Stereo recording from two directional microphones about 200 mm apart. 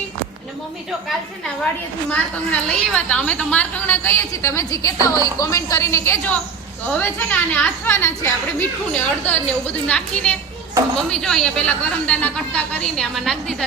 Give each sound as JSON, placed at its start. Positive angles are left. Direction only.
{"t": 2.0, "sound": "a woman's voice", "side_deg": 5}